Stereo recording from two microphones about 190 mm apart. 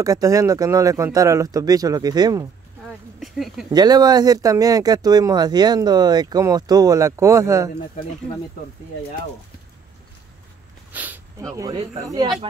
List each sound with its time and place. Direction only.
0.0 s speech: 15° right (ahead or behind)
3.2 s speech: centre (ahead or behind)
3.7 s speech: 20° right (ahead or behind)
10.9 s a sound: 10° right (ahead or behind)